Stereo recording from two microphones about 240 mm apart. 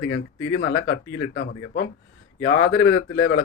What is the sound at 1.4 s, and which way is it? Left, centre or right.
Speech, left.